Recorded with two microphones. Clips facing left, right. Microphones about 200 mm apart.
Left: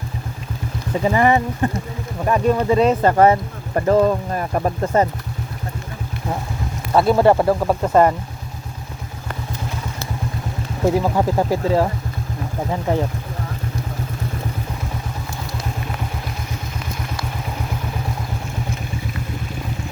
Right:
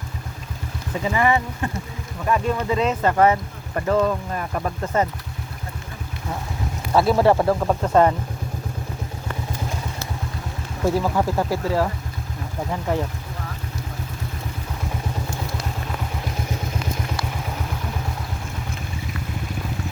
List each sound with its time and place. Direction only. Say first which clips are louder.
1.0 s speech: left 4 dB; 40° left (ahead or behind)
6.9 s speech: left 3 dB; centre (ahead or behind)
10.8 s speech: left 3 dB; 15° left (ahead or behind)